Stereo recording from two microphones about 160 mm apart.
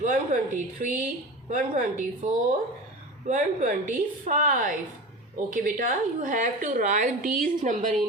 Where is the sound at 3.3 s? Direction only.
55° right (ahead or behind).